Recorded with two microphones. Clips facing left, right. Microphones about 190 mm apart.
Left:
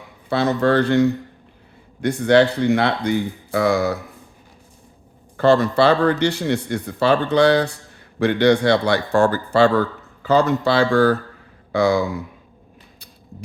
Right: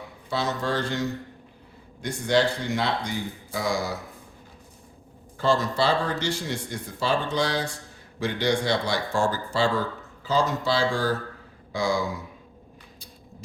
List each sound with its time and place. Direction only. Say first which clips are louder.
0.3 s speech: left 10 dB; 60° left (ahead or behind)
5.4 s speech: left 8 dB; 60° left (ahead or behind)